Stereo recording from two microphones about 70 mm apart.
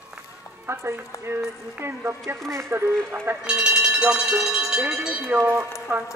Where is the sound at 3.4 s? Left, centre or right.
Centre.